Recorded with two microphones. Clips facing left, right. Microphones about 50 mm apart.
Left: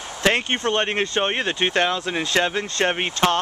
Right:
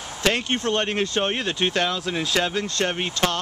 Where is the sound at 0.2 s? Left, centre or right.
Left.